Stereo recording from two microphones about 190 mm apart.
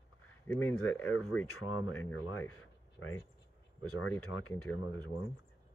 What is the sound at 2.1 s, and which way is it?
Speech, 90° left.